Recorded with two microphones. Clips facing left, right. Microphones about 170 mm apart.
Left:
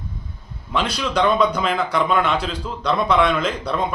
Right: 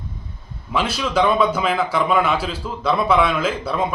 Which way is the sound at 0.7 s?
5° right (ahead or behind).